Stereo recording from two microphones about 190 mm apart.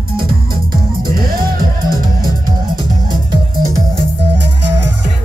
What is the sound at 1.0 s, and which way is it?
Music, 50° right (ahead or behind).